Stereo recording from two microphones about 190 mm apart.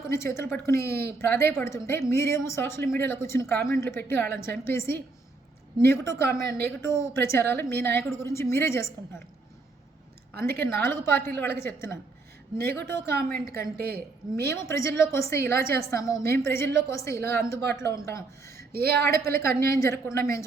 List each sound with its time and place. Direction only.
0.1 s a woman's voice: 15° left (ahead or behind)
10.3 s speech: 55° right (ahead or behind)
10.6 s a woman's voice: 10° left (ahead or behind)
13.6 s speech: 55° right (ahead or behind)
14.5 s a woman's voice: 15° left (ahead or behind)
18.7 s speech: 55° right (ahead or behind)
19.2 s a woman's voice: 15° left (ahead or behind)